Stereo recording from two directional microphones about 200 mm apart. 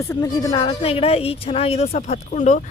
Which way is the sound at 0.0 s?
15° left (ahead or behind).